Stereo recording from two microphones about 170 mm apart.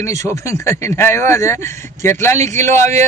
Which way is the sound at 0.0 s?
20° left (ahead or behind).